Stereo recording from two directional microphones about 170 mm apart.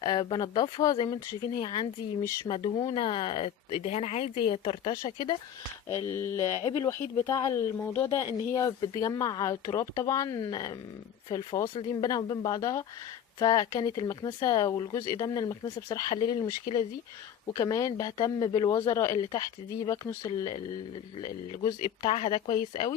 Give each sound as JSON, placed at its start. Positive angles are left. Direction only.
{"t": 0.0, "sound": "speech", "side_deg": 25}
{"t": 5.9, "sound": "speech", "side_deg": 15}
{"t": 22.1, "sound": "speech", "side_deg": 35}